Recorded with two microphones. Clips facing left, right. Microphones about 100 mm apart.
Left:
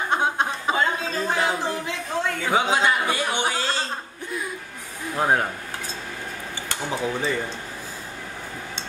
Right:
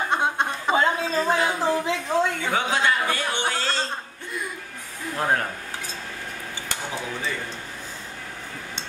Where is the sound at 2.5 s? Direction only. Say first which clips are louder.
Left 5 dB; 15° left (ahead or behind).